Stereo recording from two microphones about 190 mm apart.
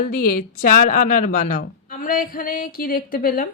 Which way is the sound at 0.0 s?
50° left (ahead or behind).